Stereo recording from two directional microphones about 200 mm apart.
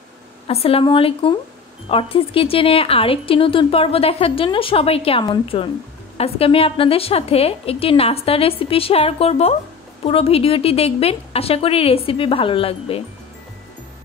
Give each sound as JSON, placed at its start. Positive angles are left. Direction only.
{"t": 0.5, "sound": "speech", "side_deg": 30}